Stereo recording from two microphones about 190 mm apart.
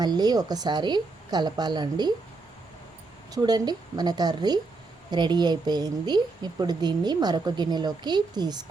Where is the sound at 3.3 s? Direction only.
20° right (ahead or behind).